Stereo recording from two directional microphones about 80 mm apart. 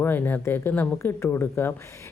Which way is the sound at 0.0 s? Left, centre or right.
Left.